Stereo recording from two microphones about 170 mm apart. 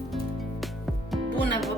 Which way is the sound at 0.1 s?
Centre (ahead or behind).